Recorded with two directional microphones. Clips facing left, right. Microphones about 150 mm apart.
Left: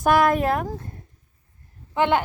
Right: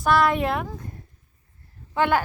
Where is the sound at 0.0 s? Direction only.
50° left (ahead or behind).